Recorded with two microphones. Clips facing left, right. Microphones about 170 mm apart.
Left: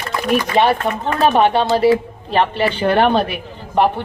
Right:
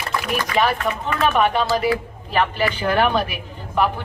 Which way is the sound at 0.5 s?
30° left (ahead or behind).